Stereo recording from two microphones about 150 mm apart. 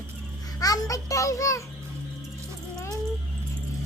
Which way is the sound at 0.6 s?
25° left (ahead or behind).